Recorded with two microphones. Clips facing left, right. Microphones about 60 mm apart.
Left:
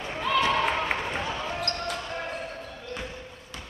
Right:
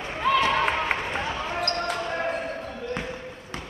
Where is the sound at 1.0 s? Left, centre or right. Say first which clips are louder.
Right 2 dB; centre.